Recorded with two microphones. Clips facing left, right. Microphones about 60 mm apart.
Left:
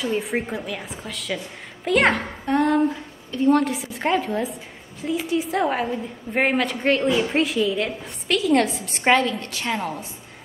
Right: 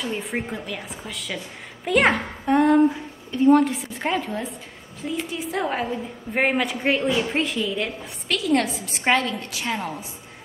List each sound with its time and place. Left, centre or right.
0.0 s a woman's voice: centre